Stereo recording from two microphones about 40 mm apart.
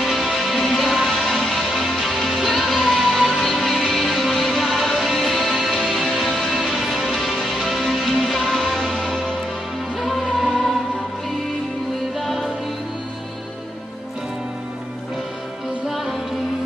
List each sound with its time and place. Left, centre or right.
0.0 s music: centre
12.2 s music: centre